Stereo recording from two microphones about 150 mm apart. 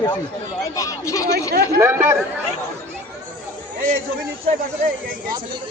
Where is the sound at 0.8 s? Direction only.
20° left (ahead or behind).